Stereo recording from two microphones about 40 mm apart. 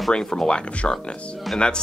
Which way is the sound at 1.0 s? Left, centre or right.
Left.